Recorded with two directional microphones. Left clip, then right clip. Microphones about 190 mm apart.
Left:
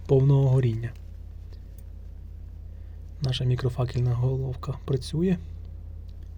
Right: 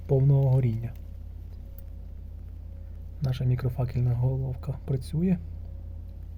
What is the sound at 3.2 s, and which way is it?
Speech, 20° left (ahead or behind).